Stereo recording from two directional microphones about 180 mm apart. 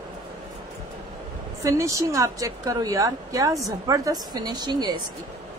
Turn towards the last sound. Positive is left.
turn(degrees=-25)  # may be behind; listen again after turning